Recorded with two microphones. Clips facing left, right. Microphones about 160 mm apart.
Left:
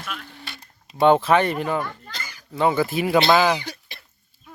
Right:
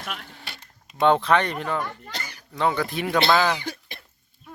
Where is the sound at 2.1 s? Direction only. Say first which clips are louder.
Right 2 dB; 70° right (ahead or behind).